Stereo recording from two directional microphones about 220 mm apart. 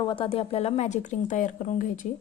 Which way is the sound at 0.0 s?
25° left (ahead or behind).